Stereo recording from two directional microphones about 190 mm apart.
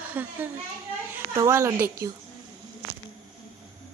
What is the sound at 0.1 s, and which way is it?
A child's voice, 10° right (ahead or behind).